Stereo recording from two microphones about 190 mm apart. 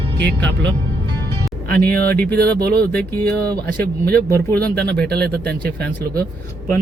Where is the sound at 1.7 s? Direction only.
10° left (ahead or behind).